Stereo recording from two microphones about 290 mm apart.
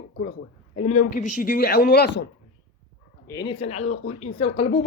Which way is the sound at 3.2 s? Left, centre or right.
Centre.